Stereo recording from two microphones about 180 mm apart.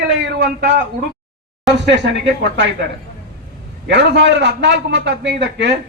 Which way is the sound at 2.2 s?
80° right.